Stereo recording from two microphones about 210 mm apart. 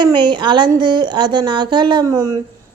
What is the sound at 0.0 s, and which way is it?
A woman's voice, 20° right (ahead or behind).